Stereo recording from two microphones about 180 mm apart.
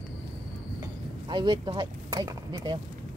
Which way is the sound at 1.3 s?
25° right (ahead or behind).